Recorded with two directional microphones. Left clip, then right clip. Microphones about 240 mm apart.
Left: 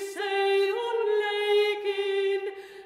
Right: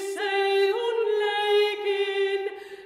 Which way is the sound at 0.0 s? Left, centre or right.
Left.